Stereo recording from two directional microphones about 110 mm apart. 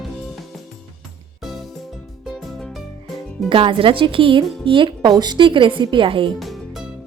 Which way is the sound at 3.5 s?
55° right (ahead or behind).